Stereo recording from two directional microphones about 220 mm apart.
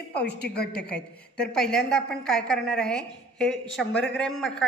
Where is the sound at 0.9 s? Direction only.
5° left (ahead or behind).